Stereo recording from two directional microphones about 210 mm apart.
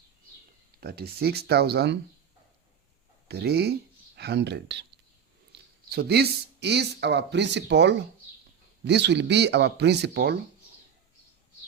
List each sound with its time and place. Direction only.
0.8 s speech: 50° right (ahead or behind)
3.2 s speech: 50° right (ahead or behind)